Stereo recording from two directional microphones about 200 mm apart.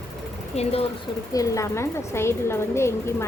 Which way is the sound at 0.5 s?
30° left (ahead or behind).